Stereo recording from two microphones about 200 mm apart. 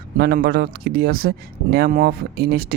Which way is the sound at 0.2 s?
50° right (ahead or behind).